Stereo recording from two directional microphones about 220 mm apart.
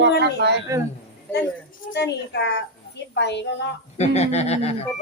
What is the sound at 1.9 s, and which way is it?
A woman's voice, 50° left (ahead or behind).